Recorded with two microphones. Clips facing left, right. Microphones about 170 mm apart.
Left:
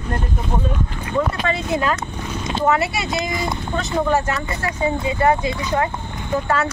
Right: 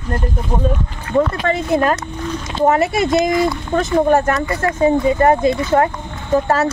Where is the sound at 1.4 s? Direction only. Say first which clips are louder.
Right 5 dB; 50° right (ahead or behind).